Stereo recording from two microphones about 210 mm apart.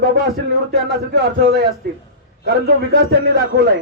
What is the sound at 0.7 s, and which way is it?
A man's voice, 50° right (ahead or behind).